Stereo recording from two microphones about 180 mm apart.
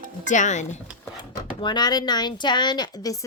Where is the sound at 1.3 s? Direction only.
25° left (ahead or behind).